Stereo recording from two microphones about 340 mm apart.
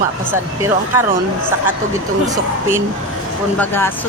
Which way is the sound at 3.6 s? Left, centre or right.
Centre.